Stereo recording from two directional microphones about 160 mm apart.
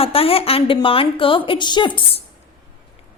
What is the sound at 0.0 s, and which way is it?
A woman's voice, 35° left (ahead or behind).